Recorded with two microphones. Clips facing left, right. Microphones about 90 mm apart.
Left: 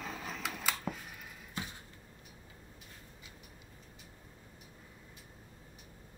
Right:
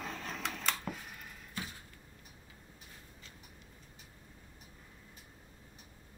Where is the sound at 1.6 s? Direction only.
25° left (ahead or behind).